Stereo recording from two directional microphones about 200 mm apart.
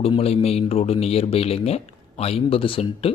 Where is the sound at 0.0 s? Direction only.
30° left (ahead or behind).